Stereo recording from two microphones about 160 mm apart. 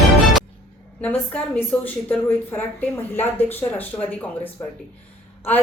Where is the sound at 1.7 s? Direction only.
5° left (ahead or behind).